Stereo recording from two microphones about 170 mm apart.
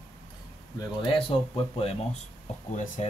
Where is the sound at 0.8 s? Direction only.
30° left (ahead or behind).